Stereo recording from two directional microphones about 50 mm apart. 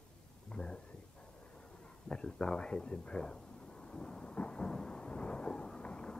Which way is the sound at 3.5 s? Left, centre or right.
Centre.